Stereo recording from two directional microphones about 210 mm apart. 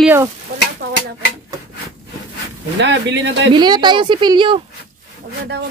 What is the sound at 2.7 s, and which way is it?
Speech, 55° right (ahead or behind).